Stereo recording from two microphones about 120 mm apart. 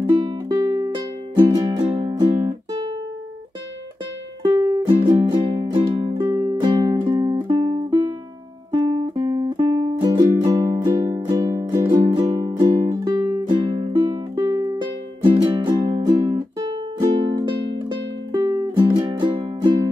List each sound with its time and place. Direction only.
0.1 s music: 40° right (ahead or behind)
4.4 s music: 30° right (ahead or behind)
8.7 s music: 45° right (ahead or behind)
18.4 s music: 30° right (ahead or behind)
18.8 s music: 40° right (ahead or behind)